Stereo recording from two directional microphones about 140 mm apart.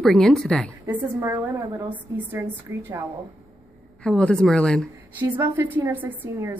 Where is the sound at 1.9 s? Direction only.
15° right (ahead or behind).